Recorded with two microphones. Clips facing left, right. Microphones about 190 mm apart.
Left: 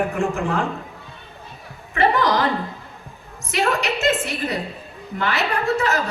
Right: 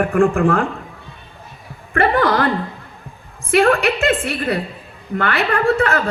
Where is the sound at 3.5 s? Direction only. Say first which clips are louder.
Right 7 dB; 55° right (ahead or behind).